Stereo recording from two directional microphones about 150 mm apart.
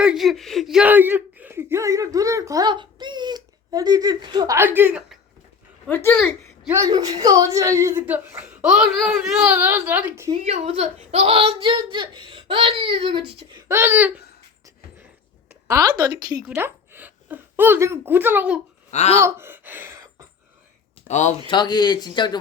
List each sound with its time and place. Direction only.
0.0 s speech: 5° right (ahead or behind)
5.9 s speech: 15° left (ahead or behind)
6.7 s a child's voice: 20° right (ahead or behind)
10.4 s speech: 45° right (ahead or behind)
13.7 s a child's voice: 15° right (ahead or behind)
15.6 s speech: 20° right (ahead or behind)
16.5 s speech: 15° right (ahead or behind)
18.9 s speech: 50° left (ahead or behind)
19.2 s gasp: 15° right (ahead or behind)
21.1 s speech: 50° left (ahead or behind)
21.4 s speech: 30° left (ahead or behind)